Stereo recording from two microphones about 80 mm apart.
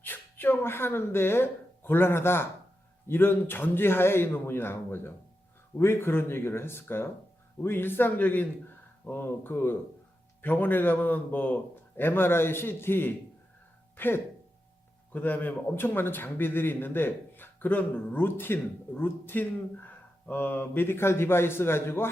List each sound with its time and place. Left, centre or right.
0.0 s a man's voice: left